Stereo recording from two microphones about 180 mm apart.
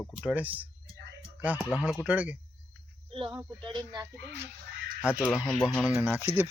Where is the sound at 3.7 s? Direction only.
25° right (ahead or behind).